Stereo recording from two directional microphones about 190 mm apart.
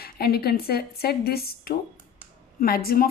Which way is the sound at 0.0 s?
55° left (ahead or behind).